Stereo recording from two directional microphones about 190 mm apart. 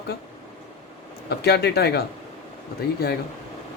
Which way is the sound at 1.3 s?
55° left (ahead or behind).